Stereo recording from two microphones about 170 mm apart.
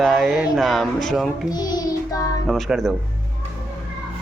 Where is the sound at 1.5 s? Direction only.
25° left (ahead or behind).